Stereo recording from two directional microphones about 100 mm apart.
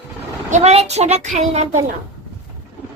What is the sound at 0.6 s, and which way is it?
Speech, 90° right.